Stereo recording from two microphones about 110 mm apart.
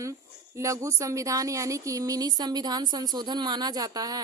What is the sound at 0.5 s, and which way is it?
A woman's voice, 30° right (ahead or behind).